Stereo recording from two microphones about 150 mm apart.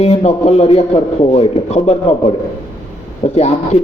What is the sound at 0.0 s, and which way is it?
Speech, 45° left (ahead or behind).